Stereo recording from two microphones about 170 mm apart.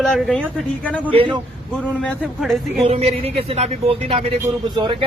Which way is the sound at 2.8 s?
35° right (ahead or behind).